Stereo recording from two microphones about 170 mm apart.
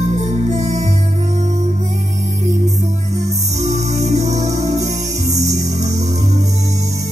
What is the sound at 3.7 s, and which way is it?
Music, 40° right (ahead or behind).